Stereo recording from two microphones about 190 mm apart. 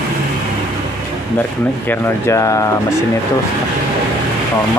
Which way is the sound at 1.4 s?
10° left (ahead or behind).